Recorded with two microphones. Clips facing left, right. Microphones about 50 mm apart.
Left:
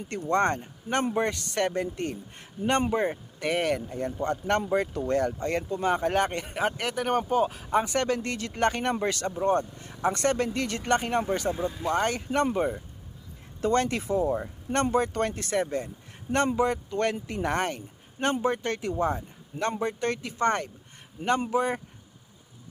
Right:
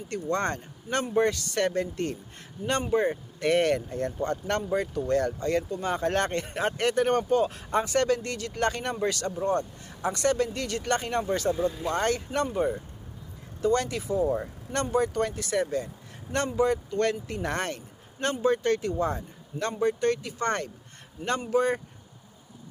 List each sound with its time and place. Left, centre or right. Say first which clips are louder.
0.1 s speech: left 3 dB; left
3.4 s speech: right 3 dB; centre; by 6.1 s left
6.1 s speech: left 1 dB; centre
7.8 s speech: right 1 dB; left